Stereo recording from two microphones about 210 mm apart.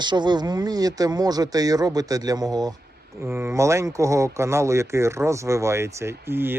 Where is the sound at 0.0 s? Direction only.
20° right (ahead or behind).